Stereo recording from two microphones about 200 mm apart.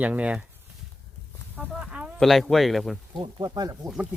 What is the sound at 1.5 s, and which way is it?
Speech, 5° right (ahead or behind).